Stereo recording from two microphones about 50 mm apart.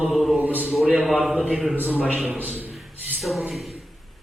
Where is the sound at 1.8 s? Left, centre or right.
Right.